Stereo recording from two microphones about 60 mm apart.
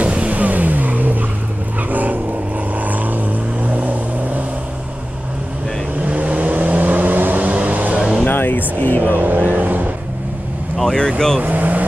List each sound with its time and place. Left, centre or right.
0.0 s vehicle: right
6.0 s vehicle: right
8.3 s music: left
9.1 s vehicle: right
10.8 s vehicle: centre
11.4 s vehicle: right